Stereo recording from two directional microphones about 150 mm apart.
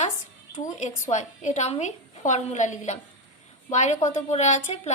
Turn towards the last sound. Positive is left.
turn(degrees=50)  # may be behind; listen again after turning